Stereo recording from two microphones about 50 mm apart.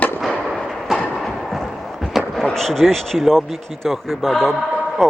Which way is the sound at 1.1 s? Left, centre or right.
Centre.